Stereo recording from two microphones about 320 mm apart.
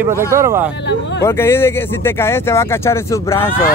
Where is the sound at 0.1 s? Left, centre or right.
Centre.